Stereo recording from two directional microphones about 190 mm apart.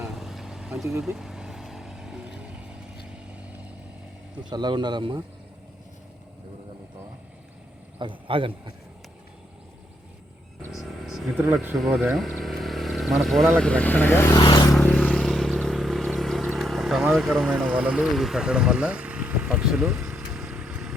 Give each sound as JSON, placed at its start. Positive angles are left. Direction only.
{"t": 0.0, "sound": "vehicle", "side_deg": 0}
{"t": 4.4, "sound": "speech", "side_deg": -20}
{"t": 7.9, "sound": "speech", "side_deg": -25}
{"t": 10.7, "sound": "speech", "side_deg": 0}
{"t": 14.7, "sound": "vehicle", "side_deg": 5}
{"t": 17.7, "sound": "speech", "side_deg": -5}